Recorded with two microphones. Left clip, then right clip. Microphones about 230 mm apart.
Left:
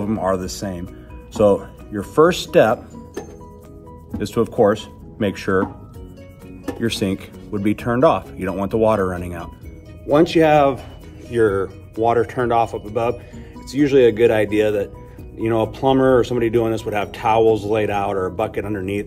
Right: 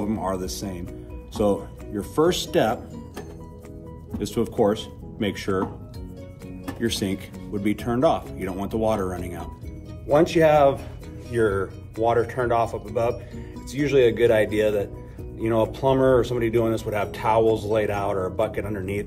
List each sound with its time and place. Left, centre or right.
0.1 s speech: left
4.2 s speech: left
6.8 s speech: left